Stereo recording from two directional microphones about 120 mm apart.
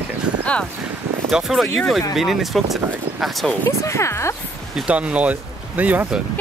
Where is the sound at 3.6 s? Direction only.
25° left (ahead or behind).